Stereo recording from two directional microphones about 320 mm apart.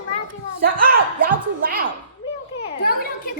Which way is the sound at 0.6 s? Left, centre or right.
Right.